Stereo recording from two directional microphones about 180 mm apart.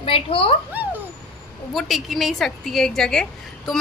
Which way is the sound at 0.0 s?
30° left (ahead or behind).